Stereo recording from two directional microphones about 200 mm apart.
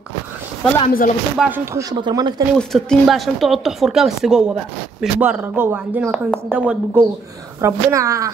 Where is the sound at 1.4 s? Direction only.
10° right (ahead or behind).